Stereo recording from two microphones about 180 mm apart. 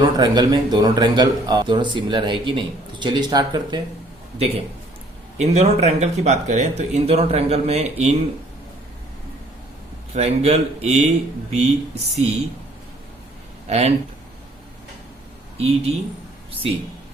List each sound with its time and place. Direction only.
0.0 s speech: 25° right (ahead or behind)
4.4 s speech: 35° right (ahead or behind)
10.2 s speech: 35° right (ahead or behind)
13.7 s speech: 35° right (ahead or behind)
15.5 s speech: 35° right (ahead or behind)